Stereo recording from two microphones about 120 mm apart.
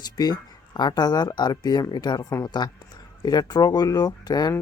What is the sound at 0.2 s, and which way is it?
Speech, 35° left (ahead or behind).